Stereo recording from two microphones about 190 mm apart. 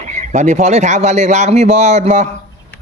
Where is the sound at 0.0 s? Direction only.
40° right (ahead or behind).